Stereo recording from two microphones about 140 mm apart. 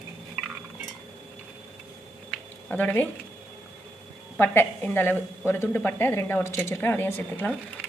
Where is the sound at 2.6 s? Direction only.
10° left (ahead or behind).